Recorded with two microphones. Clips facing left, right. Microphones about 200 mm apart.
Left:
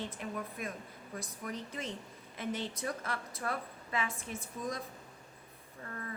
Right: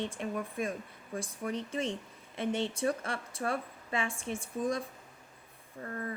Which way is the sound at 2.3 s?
25° right (ahead or behind).